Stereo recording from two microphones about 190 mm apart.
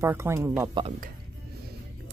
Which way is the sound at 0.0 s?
15° right (ahead or behind).